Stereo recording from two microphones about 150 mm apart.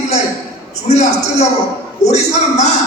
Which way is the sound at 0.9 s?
50° left (ahead or behind).